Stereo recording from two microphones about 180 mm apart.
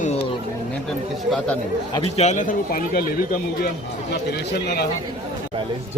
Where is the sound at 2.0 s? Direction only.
40° left (ahead or behind); by 4.9 s 65° left (ahead or behind).